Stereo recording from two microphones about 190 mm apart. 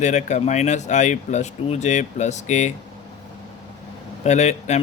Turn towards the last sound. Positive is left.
turn(degrees=35)  # may be behind; listen again after turning